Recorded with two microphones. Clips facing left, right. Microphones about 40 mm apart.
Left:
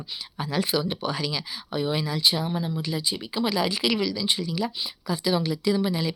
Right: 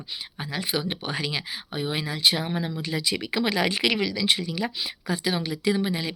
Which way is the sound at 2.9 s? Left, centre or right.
Right.